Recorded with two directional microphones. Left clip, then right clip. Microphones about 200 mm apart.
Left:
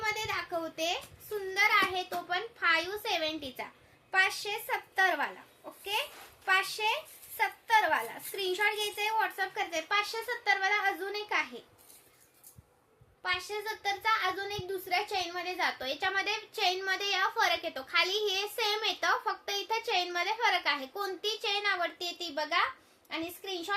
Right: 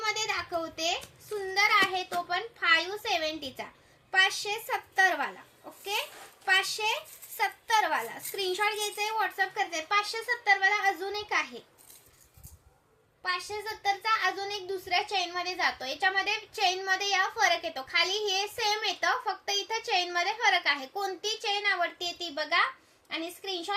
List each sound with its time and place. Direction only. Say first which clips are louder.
0.0 s a sound: right 2 dB; 10° left (ahead or behind)
1.5 s a child's voice: right 2 dB; 15° left (ahead or behind)
6.4 s a child's voice: right 2 dB; 5° left (ahead or behind)
13.2 s a child's voice: right 1 dB; 15° left (ahead or behind)